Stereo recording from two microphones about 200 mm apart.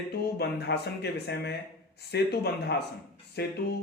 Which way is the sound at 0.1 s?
55° left (ahead or behind).